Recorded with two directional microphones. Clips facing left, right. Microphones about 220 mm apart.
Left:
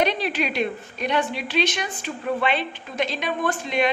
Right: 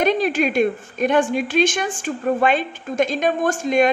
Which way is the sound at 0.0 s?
45° right (ahead or behind).